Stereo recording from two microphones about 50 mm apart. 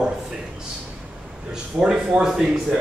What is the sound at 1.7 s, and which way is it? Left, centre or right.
Speech, right.